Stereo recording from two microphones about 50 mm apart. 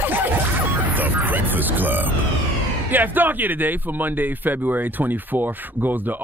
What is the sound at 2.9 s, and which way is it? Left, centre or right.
Speech, right.